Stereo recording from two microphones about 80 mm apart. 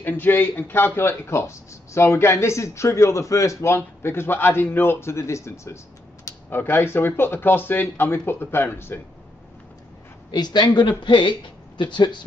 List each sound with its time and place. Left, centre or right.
0.0 s speech: left
10.3 s speech: left